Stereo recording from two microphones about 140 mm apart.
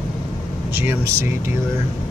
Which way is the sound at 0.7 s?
15° right (ahead or behind).